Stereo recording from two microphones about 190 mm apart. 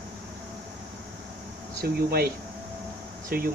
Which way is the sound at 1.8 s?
55° right (ahead or behind).